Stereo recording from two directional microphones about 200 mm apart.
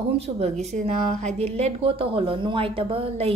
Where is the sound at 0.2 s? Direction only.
35° right (ahead or behind).